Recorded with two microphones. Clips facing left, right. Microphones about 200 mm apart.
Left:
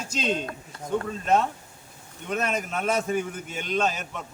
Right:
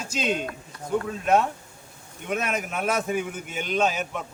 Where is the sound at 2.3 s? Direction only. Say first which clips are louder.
Even; 10° right (ahead or behind).